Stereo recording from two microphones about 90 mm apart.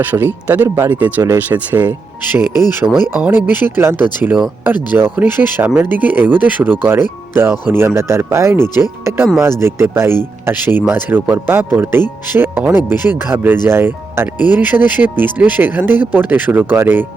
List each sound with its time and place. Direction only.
0.0 s speech: 20° right (ahead or behind)